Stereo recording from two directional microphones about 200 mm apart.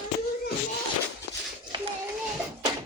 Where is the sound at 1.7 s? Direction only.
20° right (ahead or behind).